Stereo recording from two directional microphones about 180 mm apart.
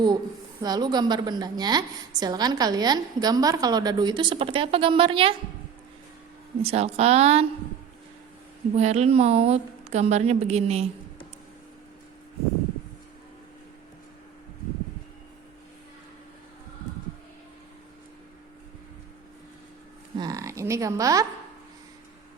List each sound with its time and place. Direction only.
0.6 s a woman's voice: 20° right (ahead or behind)
6.6 s a woman's voice: 35° right (ahead or behind)
8.7 s a woman's voice: 40° right (ahead or behind)
20.1 s speech: 20° right (ahead or behind)